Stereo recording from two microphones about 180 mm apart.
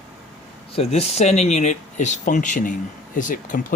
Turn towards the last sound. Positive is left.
turn(degrees=45)  # may be behind; listen again after turning